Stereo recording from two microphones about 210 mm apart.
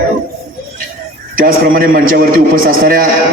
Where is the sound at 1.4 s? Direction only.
45° right (ahead or behind).